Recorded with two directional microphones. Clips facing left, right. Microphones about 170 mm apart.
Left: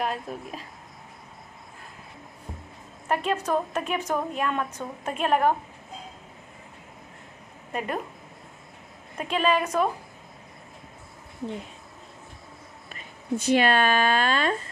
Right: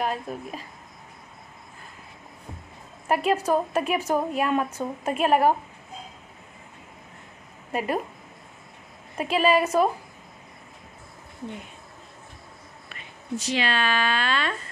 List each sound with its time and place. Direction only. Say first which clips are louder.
0.0 s speech: right 1 dB; centre (ahead or behind)
3.1 s a woman's voice: right 3 dB; 10° right (ahead or behind)
7.7 s a woman's voice: right 4 dB; 5° right (ahead or behind)
9.2 s a woman's voice: right 3 dB; 10° right (ahead or behind)
13.4 s speech: left 5 dB; 55° left (ahead or behind)